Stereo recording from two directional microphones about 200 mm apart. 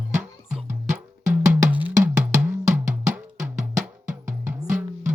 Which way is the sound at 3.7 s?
40° right (ahead or behind).